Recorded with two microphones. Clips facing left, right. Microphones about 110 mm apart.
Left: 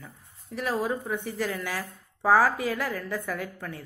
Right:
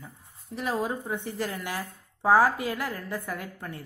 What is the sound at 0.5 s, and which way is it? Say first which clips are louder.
A woman's voice: left 1 dB; 20° right (ahead or behind).